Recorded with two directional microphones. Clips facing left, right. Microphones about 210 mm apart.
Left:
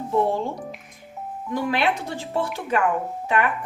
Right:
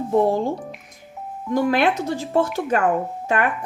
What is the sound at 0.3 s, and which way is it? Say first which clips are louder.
Speech: right 4 dB; 40° right (ahead or behind).